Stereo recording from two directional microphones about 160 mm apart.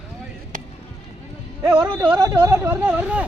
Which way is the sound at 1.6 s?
30° right (ahead or behind).